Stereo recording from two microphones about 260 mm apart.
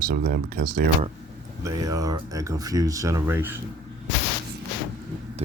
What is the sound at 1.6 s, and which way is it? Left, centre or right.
Speech, centre.